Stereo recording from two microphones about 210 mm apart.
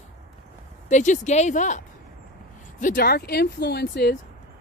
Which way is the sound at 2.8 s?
40° left (ahead or behind).